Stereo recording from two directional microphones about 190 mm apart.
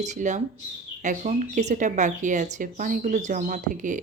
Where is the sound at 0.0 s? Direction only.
40° right (ahead or behind).